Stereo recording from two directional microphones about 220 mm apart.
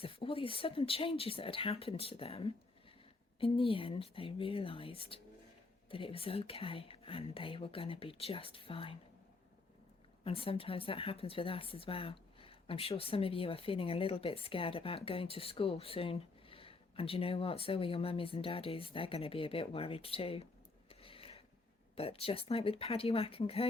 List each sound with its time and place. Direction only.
0.0 s speech: 25° left (ahead or behind)
10.2 s speech: 25° left (ahead or behind)
20.9 s a sound: 25° left (ahead or behind)
21.9 s speech: 25° left (ahead or behind)